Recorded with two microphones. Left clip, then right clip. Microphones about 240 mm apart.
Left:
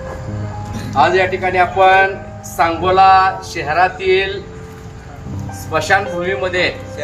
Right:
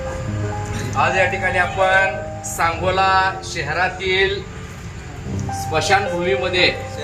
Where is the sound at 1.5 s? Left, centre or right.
Left.